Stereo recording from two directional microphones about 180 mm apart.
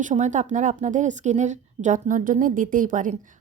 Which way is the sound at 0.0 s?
45° right (ahead or behind).